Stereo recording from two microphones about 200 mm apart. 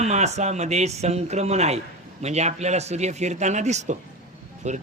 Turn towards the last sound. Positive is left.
turn(degrees=-35)  # may be behind; listen again after turning